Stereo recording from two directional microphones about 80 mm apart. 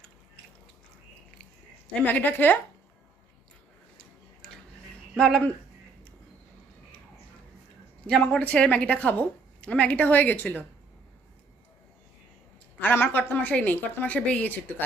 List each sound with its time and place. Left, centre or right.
1.9 s a woman's voice: centre
5.1 s speech: centre
8.0 s a woman's voice: centre
12.8 s a woman's voice: left